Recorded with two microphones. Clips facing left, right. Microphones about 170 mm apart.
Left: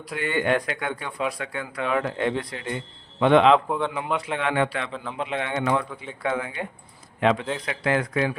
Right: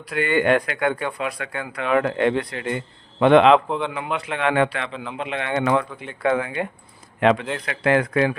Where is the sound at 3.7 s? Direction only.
5° left (ahead or behind).